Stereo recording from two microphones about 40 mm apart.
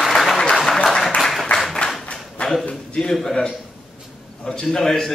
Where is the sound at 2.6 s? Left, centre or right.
Left.